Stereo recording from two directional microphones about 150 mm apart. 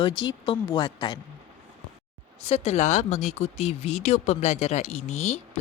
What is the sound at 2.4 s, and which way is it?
Speech, 45° left (ahead or behind).